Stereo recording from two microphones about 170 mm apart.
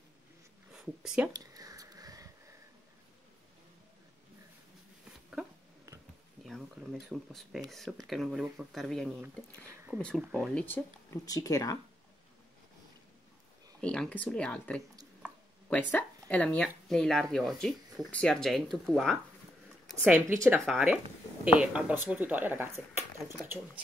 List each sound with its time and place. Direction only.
0.7 s speech: 5° right (ahead or behind)
1.3 s a sound: 20° right (ahead or behind)
6.4 s speech: centre (ahead or behind); by 11.8 s 20° left (ahead or behind)
13.7 s speech: 5° left (ahead or behind)
15.9 s speech: 10° left (ahead or behind)
20.1 s speech: 10° right (ahead or behind)
20.6 s speech: centre (ahead or behind)